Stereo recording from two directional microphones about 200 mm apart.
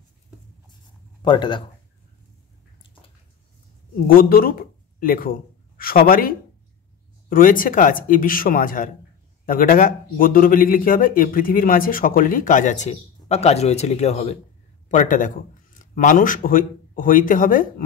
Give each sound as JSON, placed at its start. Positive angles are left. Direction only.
{"t": 1.2, "sound": "speech", "side_deg": 25}
{"t": 4.1, "sound": "a man's voice", "side_deg": 45}